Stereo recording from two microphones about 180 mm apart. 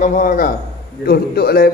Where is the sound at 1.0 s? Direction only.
60° left (ahead or behind).